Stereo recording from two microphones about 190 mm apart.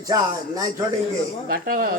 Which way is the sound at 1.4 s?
50° right (ahead or behind).